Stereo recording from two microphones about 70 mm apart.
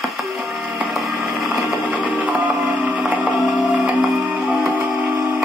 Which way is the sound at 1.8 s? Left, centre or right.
Centre.